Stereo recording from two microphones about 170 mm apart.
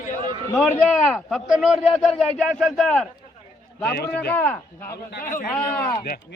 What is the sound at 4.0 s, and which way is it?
Speech, 70° left (ahead or behind).